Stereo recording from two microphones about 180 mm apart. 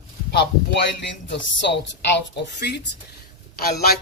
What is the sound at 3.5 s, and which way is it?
Speech, 55° left (ahead or behind).